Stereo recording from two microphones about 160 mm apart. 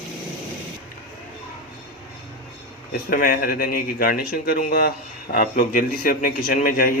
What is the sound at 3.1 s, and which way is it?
Speech, 65° left (ahead or behind).